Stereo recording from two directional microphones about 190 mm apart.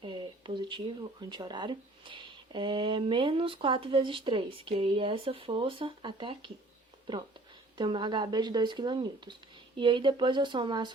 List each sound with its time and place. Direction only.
0.0 s speech: 25° right (ahead or behind)
7.8 s speech: 25° right (ahead or behind)